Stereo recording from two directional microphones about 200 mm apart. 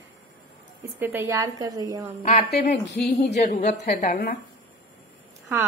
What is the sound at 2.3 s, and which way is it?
Speech, 55° left (ahead or behind).